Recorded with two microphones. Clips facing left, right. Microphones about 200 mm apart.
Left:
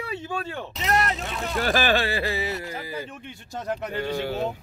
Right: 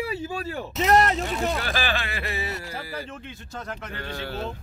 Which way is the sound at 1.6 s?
45° left (ahead or behind).